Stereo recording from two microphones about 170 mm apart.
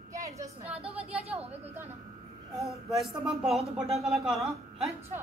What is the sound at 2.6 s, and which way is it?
A man's voice, centre (ahead or behind).